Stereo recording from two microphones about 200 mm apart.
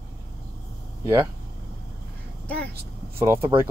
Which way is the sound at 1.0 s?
15° right (ahead or behind).